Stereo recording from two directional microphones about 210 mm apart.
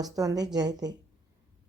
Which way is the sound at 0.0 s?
15° right (ahead or behind).